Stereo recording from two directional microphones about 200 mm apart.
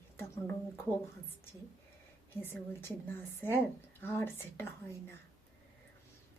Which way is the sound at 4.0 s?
10° left (ahead or behind).